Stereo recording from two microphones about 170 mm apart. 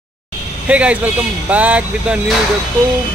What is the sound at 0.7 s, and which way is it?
Speech, 5° right (ahead or behind).